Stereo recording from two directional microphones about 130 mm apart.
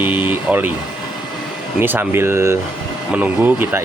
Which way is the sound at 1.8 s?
15° right (ahead or behind).